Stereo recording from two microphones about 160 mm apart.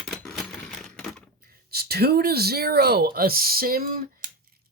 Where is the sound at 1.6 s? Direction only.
80° right.